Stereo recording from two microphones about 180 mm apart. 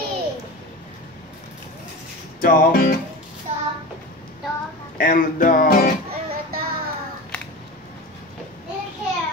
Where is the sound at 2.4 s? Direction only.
50° left (ahead or behind).